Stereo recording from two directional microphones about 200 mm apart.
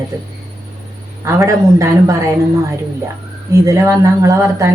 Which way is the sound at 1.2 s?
15° right (ahead or behind).